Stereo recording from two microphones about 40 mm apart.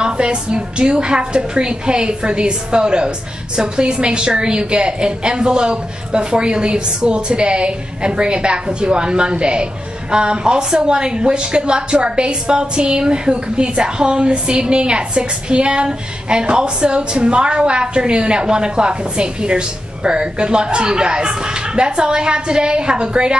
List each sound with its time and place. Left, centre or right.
0.0 s a woman's voice: right